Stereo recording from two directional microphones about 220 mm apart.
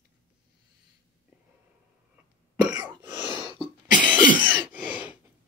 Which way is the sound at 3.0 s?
20° right (ahead or behind).